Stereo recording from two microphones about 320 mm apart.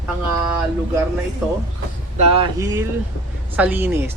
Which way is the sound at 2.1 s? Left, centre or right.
Centre.